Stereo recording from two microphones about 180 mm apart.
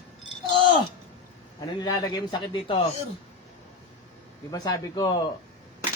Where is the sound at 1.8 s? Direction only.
25° left (ahead or behind).